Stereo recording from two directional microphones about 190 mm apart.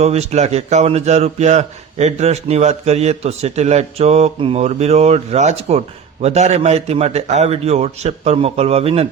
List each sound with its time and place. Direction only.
0.0 s a man's voice: 35° right (ahead or behind)